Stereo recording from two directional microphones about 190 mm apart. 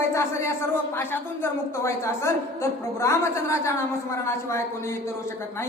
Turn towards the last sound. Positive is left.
turn(degrees=15)  # may be behind; listen again after turning